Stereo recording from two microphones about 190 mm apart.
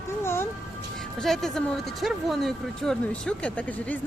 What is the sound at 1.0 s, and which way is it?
Speech, centre (ahead or behind).